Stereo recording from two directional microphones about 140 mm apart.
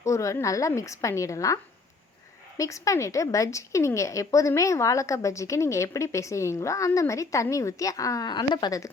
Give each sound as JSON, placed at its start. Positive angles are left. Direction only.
{"t": 0.0, "sound": "a woman's voice", "side_deg": 20}
{"t": 2.6, "sound": "a woman's voice", "side_deg": 20}